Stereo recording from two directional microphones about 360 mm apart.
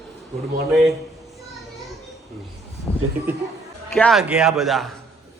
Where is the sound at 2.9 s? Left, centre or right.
Centre.